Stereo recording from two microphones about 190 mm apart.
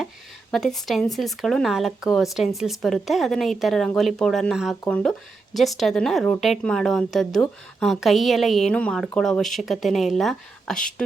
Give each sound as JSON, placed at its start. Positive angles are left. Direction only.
{"t": 0.5, "sound": "a woman's voice", "side_deg": 0}